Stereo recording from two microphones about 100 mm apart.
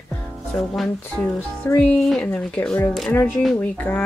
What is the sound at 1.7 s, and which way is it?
Speech, 15° left (ahead or behind).